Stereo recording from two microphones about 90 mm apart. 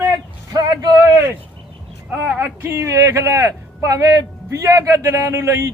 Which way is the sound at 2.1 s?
20° right (ahead or behind).